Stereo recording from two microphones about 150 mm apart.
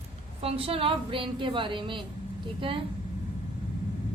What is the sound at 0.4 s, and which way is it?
A woman's voice, 40° right (ahead or behind).